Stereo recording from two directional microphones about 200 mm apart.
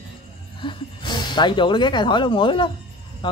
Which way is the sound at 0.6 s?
25° left (ahead or behind).